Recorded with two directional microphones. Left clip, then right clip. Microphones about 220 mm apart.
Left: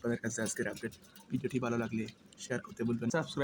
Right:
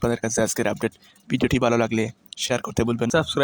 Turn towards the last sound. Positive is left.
turn(degrees=-40)  # may be behind; listen again after turning